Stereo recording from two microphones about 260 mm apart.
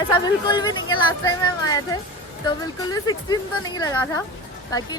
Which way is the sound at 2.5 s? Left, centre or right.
Centre.